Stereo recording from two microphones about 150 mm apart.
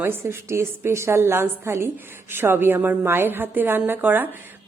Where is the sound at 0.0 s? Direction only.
15° right (ahead or behind).